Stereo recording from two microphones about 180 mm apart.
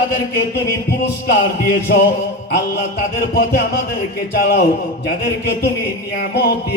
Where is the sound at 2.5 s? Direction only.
60° left (ahead or behind).